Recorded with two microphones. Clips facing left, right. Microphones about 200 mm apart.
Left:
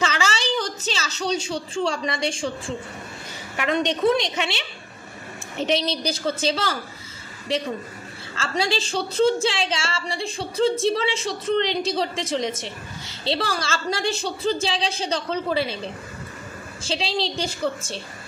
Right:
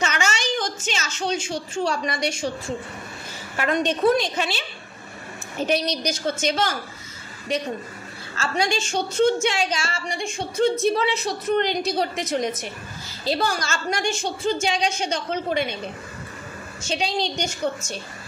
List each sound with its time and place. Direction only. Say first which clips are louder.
0.0 s a sound: left 1 dB; 30° left (ahead or behind)
2.0 s a woman's voice: even; 30° left (ahead or behind)
8.4 s a woman's voice: even; 30° left (ahead or behind)
16.8 s a woman's voice: right 1 dB; 30° left (ahead or behind)